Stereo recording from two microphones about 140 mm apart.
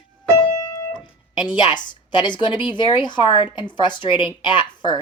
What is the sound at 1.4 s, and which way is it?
A woman's voice, 30° left (ahead or behind).